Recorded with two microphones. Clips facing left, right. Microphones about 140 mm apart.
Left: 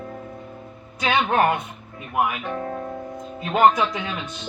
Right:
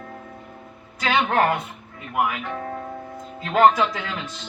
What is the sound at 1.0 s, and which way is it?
Speech, 20° left (ahead or behind).